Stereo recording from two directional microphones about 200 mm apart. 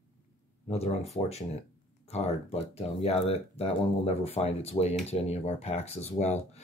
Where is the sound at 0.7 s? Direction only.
30° left (ahead or behind).